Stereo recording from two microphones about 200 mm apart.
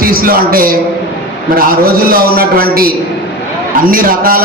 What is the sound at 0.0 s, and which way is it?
A man's voice, 45° right (ahead or behind).